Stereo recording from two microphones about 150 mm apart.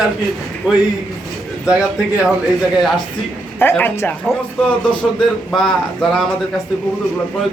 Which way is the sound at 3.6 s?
15° left (ahead or behind).